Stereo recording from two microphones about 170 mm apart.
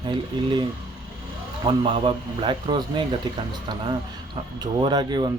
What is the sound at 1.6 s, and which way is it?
Speech, 30° right (ahead or behind).